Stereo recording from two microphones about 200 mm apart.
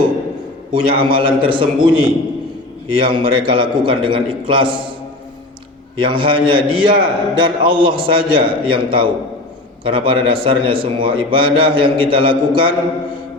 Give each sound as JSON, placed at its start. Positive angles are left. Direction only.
{"t": 0.7, "sound": "a man's voice", "side_deg": -25}
{"t": 6.0, "sound": "a man's voice", "side_deg": -25}